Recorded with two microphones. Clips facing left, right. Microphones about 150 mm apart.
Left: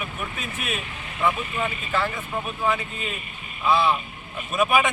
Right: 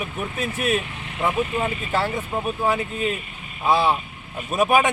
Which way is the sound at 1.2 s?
35° right (ahead or behind).